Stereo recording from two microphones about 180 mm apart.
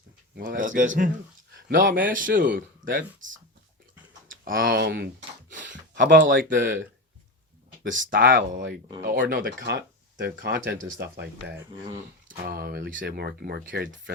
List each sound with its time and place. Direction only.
0.3 s a man's voice: 50° right (ahead or behind)
4.4 s a man's voice: 55° right (ahead or behind)
6.6 s speech: 75° right (ahead or behind)
8.1 s speech: 55° right (ahead or behind)